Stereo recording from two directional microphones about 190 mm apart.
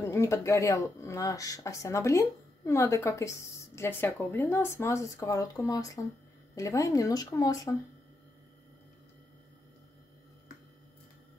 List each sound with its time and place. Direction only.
0.0 s speech: 15° left (ahead or behind)